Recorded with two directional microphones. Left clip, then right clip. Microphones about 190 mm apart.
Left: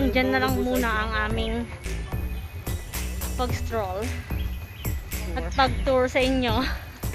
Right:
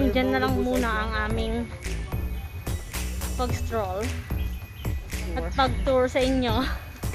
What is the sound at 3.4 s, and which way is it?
Speech, centre (ahead or behind).